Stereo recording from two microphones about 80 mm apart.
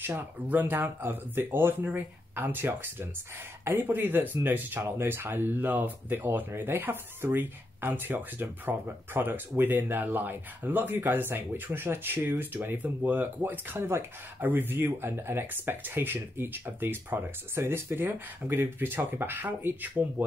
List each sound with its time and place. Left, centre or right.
0.0 s speech: right